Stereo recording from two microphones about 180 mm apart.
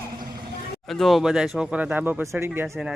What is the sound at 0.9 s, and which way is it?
Speech, centre (ahead or behind).